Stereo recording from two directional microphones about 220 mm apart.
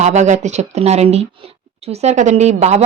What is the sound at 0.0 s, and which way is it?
A woman's voice, 30° right (ahead or behind).